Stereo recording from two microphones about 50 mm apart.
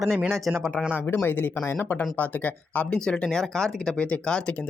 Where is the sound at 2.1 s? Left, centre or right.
Left.